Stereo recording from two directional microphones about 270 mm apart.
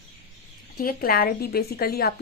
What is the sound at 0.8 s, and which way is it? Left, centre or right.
Speech, left.